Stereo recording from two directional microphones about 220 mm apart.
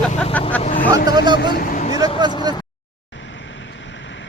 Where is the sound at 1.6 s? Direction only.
35° left (ahead or behind).